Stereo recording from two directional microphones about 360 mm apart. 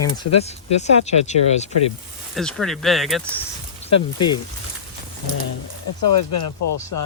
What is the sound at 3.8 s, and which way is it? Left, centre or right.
Speech, centre.